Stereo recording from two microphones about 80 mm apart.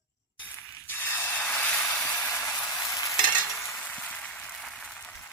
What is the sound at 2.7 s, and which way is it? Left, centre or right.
Stir, left.